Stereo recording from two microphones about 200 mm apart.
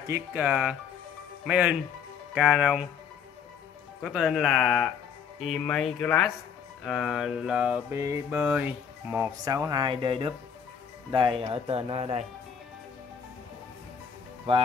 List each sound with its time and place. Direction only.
0.0 s speech: 10° right (ahead or behind)
1.4 s mantra: 5° right (ahead or behind)
4.0 s mantra: centre (ahead or behind)
9.4 s speech: 20° right (ahead or behind)